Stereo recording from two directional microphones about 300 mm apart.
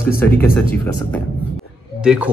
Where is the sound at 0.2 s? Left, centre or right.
Centre.